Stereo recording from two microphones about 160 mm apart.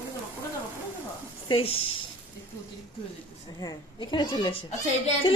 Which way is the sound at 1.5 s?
35° left (ahead or behind).